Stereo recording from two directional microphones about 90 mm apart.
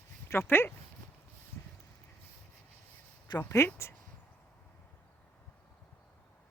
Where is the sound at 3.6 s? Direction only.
30° left (ahead or behind).